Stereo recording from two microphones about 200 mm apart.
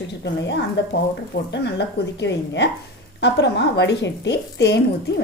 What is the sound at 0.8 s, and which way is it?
A woman's voice, 55° left (ahead or behind).